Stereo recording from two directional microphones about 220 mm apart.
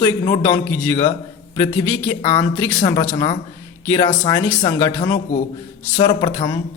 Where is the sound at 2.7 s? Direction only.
20° left (ahead or behind).